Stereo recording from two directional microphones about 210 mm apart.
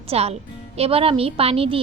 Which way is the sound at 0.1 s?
30° right (ahead or behind).